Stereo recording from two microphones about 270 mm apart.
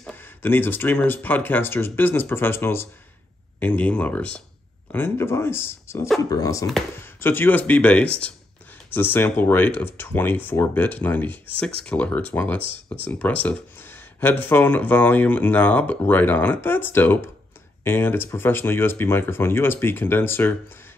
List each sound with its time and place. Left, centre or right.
0.0 s speech: centre